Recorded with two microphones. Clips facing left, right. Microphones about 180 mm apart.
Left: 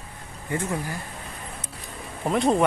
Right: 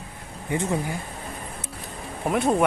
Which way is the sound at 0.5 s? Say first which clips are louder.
Right 3 dB; 20° right (ahead or behind).